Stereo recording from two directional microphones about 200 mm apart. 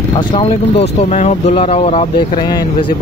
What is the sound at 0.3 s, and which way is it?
Speech, 30° left (ahead or behind).